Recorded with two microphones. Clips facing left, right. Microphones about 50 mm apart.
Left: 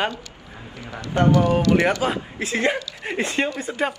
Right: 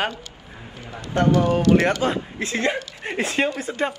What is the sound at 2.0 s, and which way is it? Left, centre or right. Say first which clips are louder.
Speech: right 1 dB; centre.